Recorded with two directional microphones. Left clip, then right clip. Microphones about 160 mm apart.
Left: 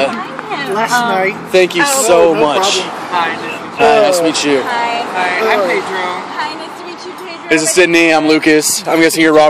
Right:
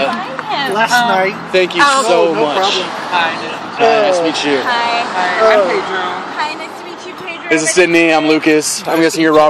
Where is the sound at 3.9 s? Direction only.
35° left (ahead or behind).